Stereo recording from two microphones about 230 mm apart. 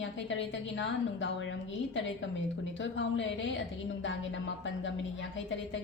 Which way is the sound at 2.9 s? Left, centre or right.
Left.